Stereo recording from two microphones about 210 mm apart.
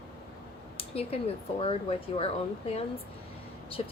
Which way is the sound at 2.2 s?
30° left (ahead or behind).